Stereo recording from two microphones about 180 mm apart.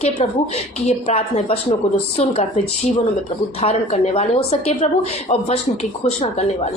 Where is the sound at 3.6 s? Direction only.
35° left (ahead or behind).